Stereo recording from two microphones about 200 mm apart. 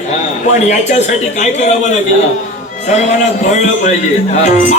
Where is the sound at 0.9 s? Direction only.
35° left (ahead or behind).